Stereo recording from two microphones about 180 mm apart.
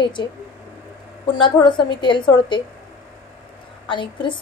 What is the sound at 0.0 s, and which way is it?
A woman's voice, 25° left (ahead or behind).